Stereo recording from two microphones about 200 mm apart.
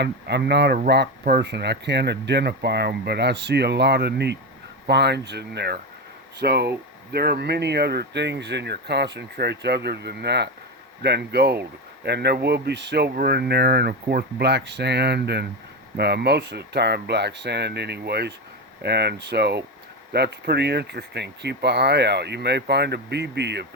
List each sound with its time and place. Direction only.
0.0 s speech: 55° right (ahead or behind)